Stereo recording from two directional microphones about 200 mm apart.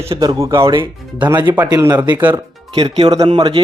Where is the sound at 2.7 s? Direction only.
20° right (ahead or behind).